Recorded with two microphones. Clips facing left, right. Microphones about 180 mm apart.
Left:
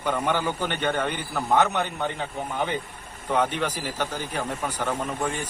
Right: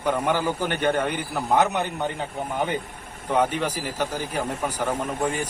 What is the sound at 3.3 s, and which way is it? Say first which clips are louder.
Speech: right 2 dB; 10° right (ahead or behind).